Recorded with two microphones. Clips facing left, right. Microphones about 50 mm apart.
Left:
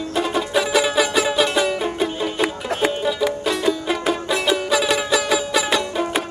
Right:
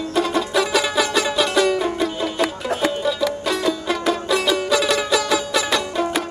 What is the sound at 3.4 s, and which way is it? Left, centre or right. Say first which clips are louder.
Music: even; centre.